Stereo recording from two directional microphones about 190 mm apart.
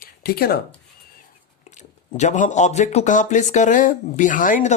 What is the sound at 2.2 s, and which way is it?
Speech, 40° left (ahead or behind).